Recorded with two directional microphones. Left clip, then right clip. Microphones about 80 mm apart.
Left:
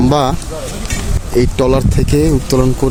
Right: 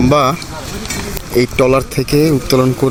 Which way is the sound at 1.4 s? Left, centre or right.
Centre.